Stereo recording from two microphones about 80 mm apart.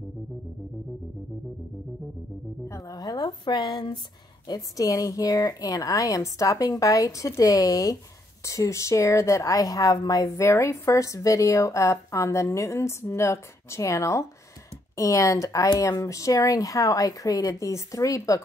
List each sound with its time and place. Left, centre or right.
2.7 s music: left
3.0 s a sound: left
4.5 s a woman's voice: left